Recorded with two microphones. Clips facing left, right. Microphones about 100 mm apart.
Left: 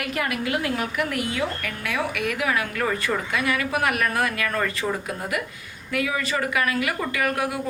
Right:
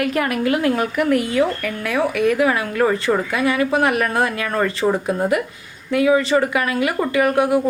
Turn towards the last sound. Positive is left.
turn(degrees=-25)  # may be behind; listen again after turning